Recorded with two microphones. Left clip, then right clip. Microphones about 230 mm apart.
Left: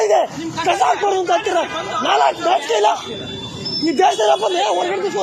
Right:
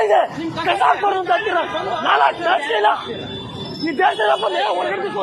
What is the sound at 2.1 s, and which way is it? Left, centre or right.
Speech, left.